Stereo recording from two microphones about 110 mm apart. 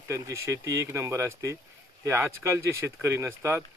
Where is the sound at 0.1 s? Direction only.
25° right (ahead or behind).